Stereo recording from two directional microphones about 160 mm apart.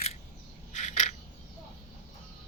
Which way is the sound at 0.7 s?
45° left (ahead or behind).